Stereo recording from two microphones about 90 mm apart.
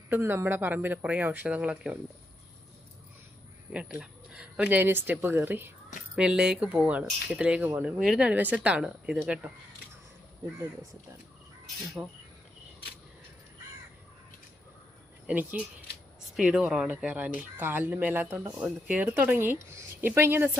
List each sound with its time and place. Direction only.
0.1 s speech: 25° right (ahead or behind)
3.7 s speech: 15° right (ahead or behind)
4.8 s speech: 25° right (ahead or behind)
6.1 s speech: 10° right (ahead or behind)
8.3 s speech: 15° right (ahead or behind)
12.0 s speech: 20° right (ahead or behind)
15.3 s speech: 15° right (ahead or behind)
18.6 s speech: 15° right (ahead or behind)